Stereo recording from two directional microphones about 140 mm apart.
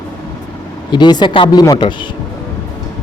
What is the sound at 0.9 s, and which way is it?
Speech, 30° left (ahead or behind).